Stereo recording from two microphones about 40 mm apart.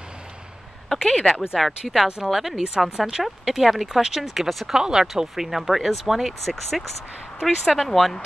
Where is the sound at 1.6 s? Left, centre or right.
Centre.